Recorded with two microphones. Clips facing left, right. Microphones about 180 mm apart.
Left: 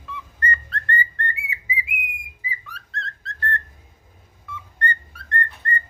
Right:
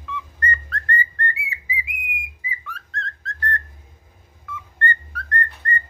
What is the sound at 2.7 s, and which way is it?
Whistling, 35° left (ahead or behind).